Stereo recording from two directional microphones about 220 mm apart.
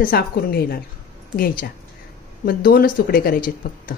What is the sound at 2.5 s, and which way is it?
Speech, 40° left (ahead or behind).